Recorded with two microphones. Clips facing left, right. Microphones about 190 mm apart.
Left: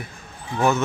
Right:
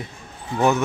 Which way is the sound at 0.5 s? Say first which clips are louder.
Right 1 dB; 15° right (ahead or behind).